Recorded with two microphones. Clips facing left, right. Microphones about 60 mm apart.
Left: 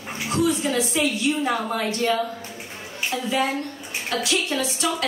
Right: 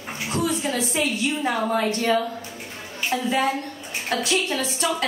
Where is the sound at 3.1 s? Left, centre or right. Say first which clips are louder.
Right 2 dB; right.